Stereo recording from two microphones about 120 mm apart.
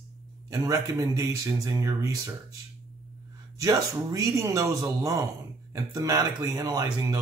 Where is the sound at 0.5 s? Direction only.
30° right (ahead or behind).